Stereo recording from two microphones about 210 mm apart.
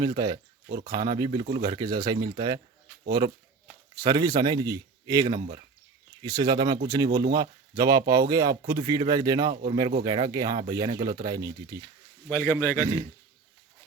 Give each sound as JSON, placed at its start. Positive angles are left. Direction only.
{"t": 0.0, "sound": "a man's voice", "side_deg": -20}
{"t": 12.3, "sound": "a man's voice", "side_deg": 10}
{"t": 12.8, "sound": "a man's voice", "side_deg": -15}